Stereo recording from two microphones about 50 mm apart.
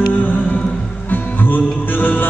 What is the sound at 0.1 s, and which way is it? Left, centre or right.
Music, left.